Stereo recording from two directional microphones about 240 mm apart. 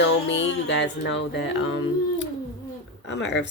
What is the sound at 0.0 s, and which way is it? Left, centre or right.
Speech, left.